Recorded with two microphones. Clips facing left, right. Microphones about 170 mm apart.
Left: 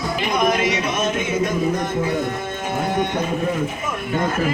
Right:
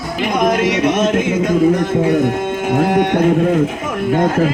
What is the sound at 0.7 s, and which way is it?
Speech, 85° right.